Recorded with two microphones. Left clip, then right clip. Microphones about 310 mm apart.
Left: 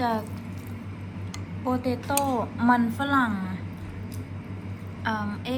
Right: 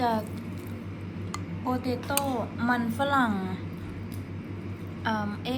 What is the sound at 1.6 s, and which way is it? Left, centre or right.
A woman's voice, centre.